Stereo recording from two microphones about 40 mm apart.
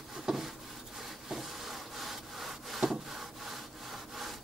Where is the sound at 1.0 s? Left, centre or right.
Centre.